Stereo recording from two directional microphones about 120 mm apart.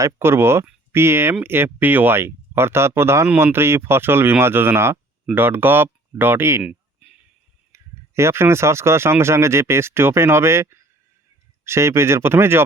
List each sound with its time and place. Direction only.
0.0 s speech: 20° right (ahead or behind)
6.6 s a sound: 10° right (ahead or behind)
7.7 s speech: 25° right (ahead or behind)